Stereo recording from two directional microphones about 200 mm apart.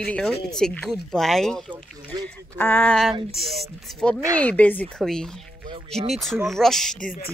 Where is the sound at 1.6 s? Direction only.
25° right (ahead or behind).